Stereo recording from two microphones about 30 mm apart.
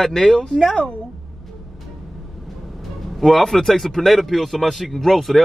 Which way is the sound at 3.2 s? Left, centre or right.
Centre.